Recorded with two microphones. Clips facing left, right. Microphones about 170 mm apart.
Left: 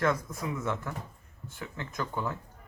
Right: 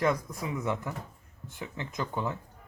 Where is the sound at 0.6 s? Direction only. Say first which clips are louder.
Right 1 dB; 15° right (ahead or behind).